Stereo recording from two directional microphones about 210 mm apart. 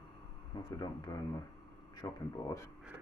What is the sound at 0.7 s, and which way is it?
Speech, 15° left (ahead or behind).